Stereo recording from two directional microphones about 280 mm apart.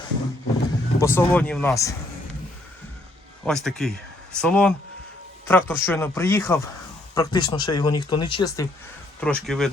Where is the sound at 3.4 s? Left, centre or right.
Centre.